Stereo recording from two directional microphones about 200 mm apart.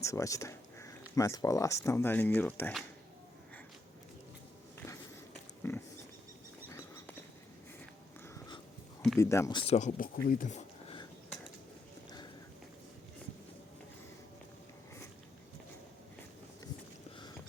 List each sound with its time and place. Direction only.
0.0 s speech: 15° left (ahead or behind)
5.6 s pig: 15° left (ahead or behind)
6.7 s a sound: 10° left (ahead or behind)
9.1 s speech: 15° left (ahead or behind); by 10.6 s 40° left (ahead or behind)